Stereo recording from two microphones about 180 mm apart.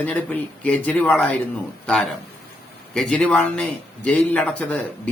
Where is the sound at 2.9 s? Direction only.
5° left (ahead or behind).